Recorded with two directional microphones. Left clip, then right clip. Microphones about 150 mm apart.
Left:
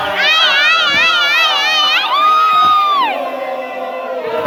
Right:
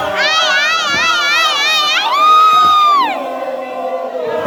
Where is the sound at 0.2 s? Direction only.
5° left (ahead or behind).